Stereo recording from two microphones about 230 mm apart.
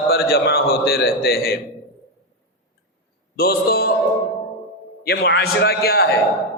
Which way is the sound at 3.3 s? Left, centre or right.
Left.